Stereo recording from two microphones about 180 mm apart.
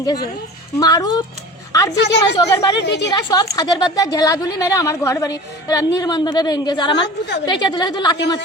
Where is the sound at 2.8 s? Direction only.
70° left (ahead or behind).